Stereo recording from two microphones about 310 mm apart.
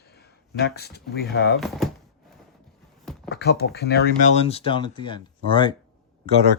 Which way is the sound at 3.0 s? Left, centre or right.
Centre.